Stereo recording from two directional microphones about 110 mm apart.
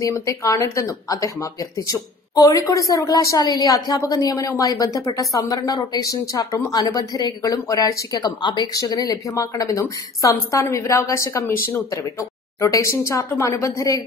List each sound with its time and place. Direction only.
0.0 s a woman's voice: 30° left (ahead or behind)
8.7 s a woman's voice: 30° left (ahead or behind)
12.5 s a woman's voice: 25° left (ahead or behind)